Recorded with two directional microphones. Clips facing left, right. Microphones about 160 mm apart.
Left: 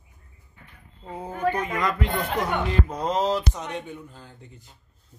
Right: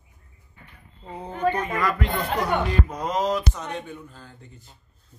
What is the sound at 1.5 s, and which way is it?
Music, 15° left (ahead or behind).